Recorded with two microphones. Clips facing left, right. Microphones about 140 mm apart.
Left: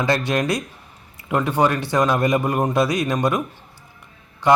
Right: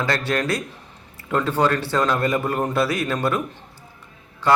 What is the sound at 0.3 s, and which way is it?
A man's voice, 15° left (ahead or behind).